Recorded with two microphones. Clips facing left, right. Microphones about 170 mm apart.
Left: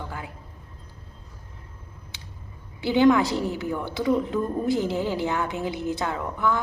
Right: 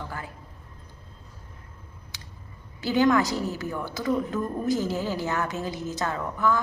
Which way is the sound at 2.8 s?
20° left (ahead or behind).